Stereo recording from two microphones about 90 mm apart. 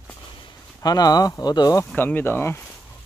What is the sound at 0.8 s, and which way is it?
Speech, 45° left (ahead or behind).